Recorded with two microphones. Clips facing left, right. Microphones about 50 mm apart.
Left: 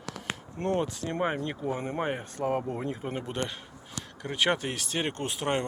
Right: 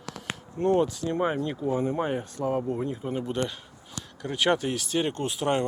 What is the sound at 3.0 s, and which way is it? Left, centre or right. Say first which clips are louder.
Speech: right 4 dB; left.